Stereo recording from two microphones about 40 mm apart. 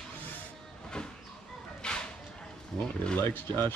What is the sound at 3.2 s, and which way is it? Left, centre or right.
Speech, left.